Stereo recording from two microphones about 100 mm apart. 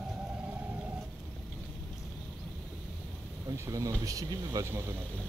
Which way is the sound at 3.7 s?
35° right (ahead or behind).